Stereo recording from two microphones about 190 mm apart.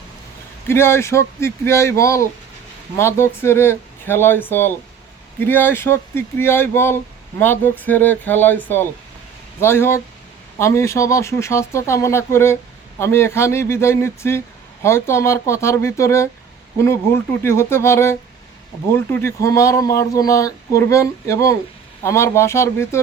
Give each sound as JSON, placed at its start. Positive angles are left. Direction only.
{"t": 0.7, "sound": "speech", "side_deg": 15}